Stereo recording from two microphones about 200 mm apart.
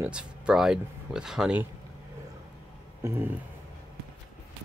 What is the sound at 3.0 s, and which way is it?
Speech, 10° right (ahead or behind).